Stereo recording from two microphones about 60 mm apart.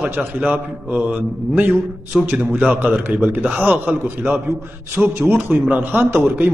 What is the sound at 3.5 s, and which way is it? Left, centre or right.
Mantra, right.